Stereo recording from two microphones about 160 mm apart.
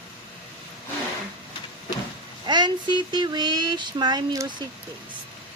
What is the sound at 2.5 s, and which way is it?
Speech, 30° right (ahead or behind).